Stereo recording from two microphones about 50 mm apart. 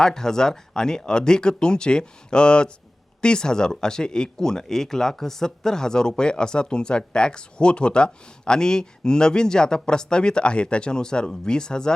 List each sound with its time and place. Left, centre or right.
0.0 s speech: centre